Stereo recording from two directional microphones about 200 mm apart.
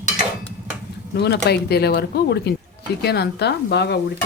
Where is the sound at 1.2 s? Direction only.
55° left (ahead or behind).